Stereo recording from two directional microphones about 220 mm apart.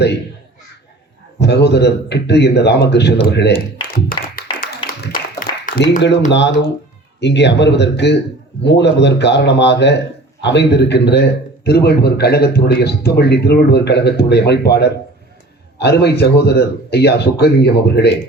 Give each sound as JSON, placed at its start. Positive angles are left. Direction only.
{"t": 1.4, "sound": "a man's voice", "side_deg": 50}
{"t": 3.8, "sound": "music", "side_deg": 40}
{"t": 4.7, "sound": "a sound", "side_deg": 45}
{"t": 6.3, "sound": "a man's voice", "side_deg": 50}